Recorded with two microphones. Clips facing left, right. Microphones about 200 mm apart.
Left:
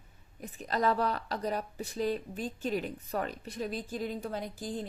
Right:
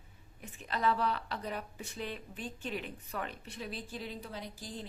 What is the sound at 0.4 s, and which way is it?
Speech, 40° left (ahead or behind).